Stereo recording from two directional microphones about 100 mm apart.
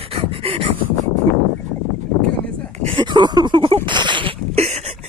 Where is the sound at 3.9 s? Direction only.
50° right (ahead or behind).